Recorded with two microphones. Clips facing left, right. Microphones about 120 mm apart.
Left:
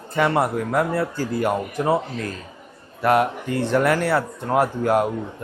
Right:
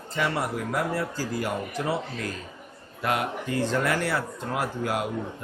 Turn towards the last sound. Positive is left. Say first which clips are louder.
# left 9 dB
turn(degrees=55)  # may be behind; listen again after turning